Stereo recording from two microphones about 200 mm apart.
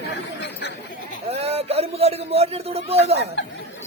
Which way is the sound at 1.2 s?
30° right (ahead or behind).